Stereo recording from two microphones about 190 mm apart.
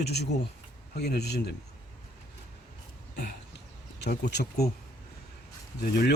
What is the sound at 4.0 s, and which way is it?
Speech, 60° left (ahead or behind).